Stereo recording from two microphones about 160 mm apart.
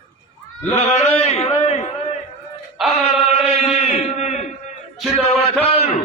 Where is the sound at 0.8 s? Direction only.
40° left (ahead or behind).